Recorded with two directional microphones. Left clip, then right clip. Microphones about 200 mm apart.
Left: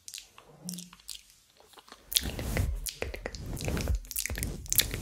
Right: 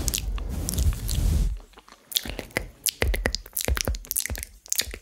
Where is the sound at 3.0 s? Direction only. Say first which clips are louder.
Right 10 dB; 55° right (ahead or behind).